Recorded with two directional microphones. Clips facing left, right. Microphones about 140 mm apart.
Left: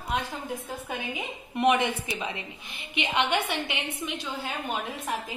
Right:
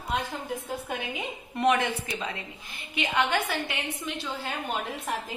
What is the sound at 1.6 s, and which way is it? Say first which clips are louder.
A woman's voice: left 1 dB; 15° left (ahead or behind).